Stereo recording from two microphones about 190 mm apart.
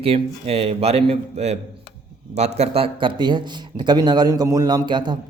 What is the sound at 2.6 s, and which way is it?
A man's voice, 30° right (ahead or behind).